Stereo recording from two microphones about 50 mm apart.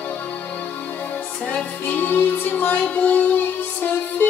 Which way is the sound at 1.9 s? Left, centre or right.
Left.